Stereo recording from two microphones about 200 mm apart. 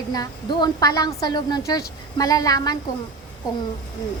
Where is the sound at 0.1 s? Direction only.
20° left (ahead or behind).